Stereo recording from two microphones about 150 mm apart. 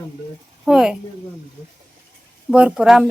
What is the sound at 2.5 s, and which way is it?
Speech, 10° right (ahead or behind).